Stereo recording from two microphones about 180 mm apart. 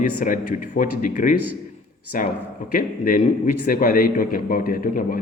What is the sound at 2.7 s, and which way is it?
A man's voice, 50° left (ahead or behind).